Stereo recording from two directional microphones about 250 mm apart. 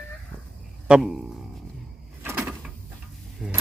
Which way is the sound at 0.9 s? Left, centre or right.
Centre.